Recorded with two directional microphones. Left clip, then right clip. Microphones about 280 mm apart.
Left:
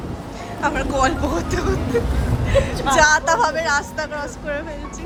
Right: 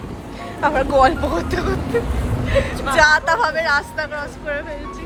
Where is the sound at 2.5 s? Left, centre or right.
Left.